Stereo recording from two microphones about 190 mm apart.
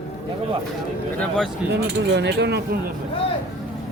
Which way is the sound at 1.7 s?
65° right (ahead or behind).